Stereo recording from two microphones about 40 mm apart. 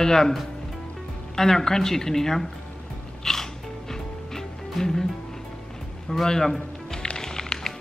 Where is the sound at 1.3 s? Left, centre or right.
Centre.